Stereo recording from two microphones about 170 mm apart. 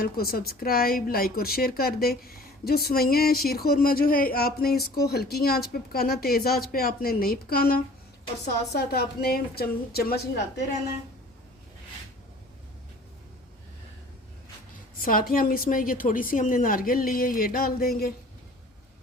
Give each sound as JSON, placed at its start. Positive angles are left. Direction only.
{"t": 0.0, "sound": "speech", "side_deg": 60}
{"t": 15.0, "sound": "speech", "side_deg": 60}